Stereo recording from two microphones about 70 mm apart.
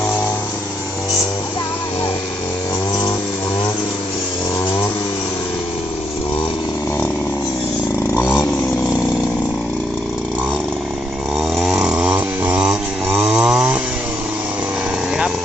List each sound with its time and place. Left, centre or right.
8.1 s vehicle: left
11.3 s snoring: centre
11.8 s a sound: centre
13.2 s chainsaw: centre